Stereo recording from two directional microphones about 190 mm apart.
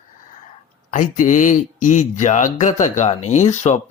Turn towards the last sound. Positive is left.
turn(degrees=35)  # may be behind; listen again after turning